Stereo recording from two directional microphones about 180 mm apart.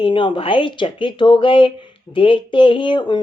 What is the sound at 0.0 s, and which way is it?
Speech, 25° left (ahead or behind).